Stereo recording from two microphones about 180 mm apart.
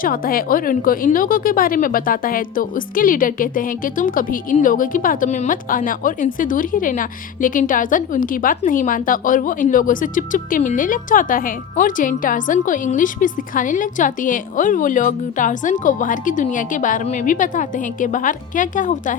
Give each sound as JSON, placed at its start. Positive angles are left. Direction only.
{"t": 0.0, "sound": "a woman's voice", "side_deg": 50}